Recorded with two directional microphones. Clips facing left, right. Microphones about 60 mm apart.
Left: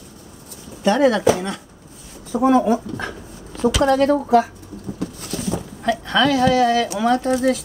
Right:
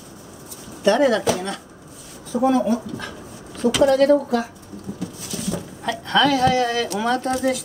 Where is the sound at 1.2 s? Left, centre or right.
Left.